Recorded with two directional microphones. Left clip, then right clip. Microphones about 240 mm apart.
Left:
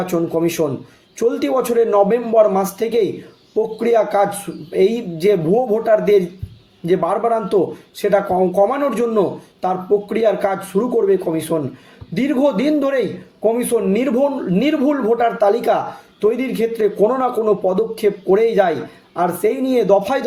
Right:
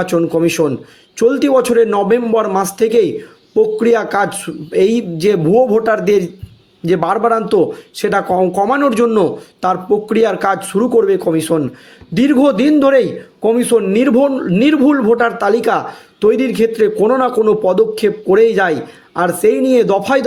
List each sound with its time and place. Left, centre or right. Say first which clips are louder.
0.0 s speech: right 5 dB; right